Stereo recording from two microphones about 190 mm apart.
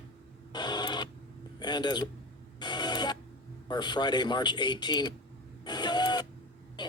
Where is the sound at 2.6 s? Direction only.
25° left (ahead or behind).